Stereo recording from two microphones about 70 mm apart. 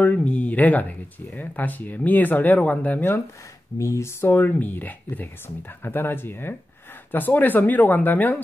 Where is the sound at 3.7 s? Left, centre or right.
Left.